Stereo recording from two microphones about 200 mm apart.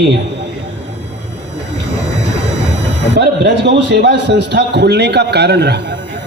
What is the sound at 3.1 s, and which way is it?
A man's voice, 60° right (ahead or behind).